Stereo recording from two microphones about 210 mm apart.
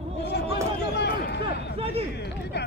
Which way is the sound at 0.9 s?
55° left (ahead or behind).